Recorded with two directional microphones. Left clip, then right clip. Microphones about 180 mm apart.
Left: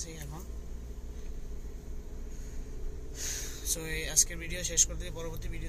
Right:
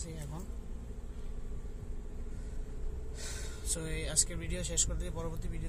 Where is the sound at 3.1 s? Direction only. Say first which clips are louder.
Left 7 dB; 15° right (ahead or behind).